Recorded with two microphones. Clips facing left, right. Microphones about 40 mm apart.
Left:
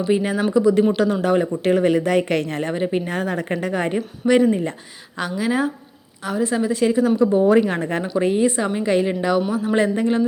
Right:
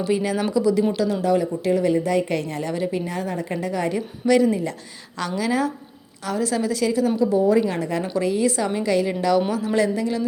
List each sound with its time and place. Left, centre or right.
0.0 s a woman's voice: left
2.7 s a woman's voice: left
7.3 s a woman's voice: left